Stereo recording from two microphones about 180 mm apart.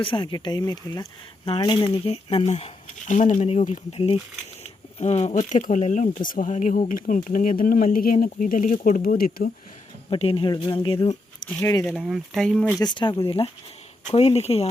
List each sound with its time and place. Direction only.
0.0 s speech: 25° left (ahead or behind); by 9.5 s 55° left (ahead or behind)
10.1 s speech: 30° left (ahead or behind)
11.7 s speech: 20° left (ahead or behind)
11.9 s speech: centre (ahead or behind)
12.8 s speech: 25° left (ahead or behind)